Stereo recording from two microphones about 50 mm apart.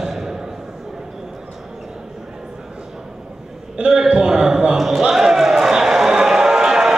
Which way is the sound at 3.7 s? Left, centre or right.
Centre.